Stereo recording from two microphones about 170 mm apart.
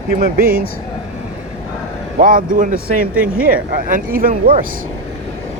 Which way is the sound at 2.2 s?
55° right (ahead or behind).